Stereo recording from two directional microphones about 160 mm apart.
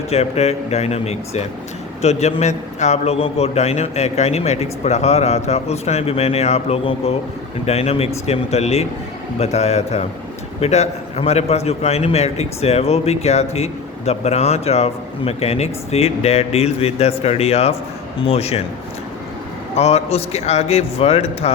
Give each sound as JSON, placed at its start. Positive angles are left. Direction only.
{"t": 0.1, "sound": "a man's voice", "side_deg": 40}
{"t": 19.7, "sound": "a man's voice", "side_deg": 40}